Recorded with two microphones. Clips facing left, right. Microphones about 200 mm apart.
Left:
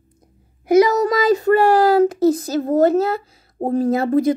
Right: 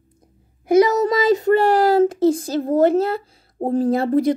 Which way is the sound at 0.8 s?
25° right (ahead or behind).